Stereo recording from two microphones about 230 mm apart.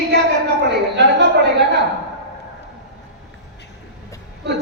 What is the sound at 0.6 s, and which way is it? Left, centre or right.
Speech, right.